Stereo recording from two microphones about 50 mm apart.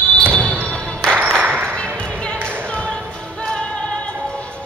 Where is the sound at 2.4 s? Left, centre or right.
Right.